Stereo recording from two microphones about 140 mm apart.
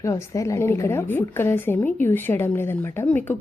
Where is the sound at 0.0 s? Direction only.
20° left (ahead or behind).